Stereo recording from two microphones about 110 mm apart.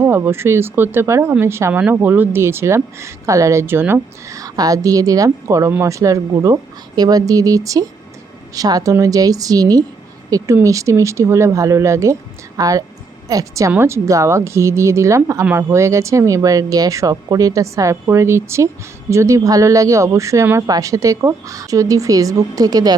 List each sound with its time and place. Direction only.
0.0 s speech: 20° right (ahead or behind)
4.4 s speech: 35° right (ahead or behind)